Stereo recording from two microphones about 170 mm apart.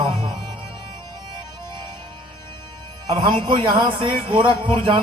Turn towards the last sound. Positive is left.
turn(degrees=-30)  # may be behind; listen again after turning